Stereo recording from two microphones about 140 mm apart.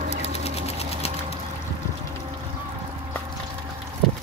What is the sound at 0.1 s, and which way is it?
Sewing machine, 50° left (ahead or behind).